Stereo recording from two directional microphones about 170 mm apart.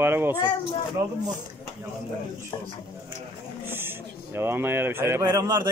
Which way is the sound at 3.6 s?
10° right (ahead or behind).